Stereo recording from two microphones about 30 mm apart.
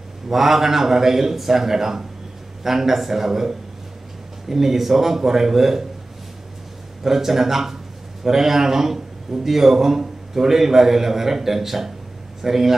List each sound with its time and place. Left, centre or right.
0.3 s a man's voice: centre
7.0 s a man's voice: centre